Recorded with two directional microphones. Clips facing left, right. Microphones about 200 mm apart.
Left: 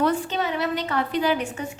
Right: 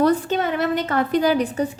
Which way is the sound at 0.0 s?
45° right (ahead or behind).